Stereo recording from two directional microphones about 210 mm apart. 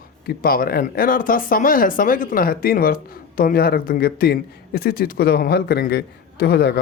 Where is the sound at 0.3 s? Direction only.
45° left (ahead or behind).